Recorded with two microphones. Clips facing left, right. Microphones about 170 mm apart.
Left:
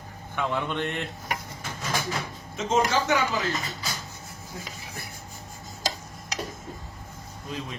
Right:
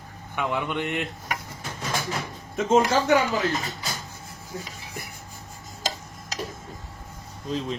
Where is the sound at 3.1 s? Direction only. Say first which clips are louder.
Right 4 dB; 35° right (ahead or behind).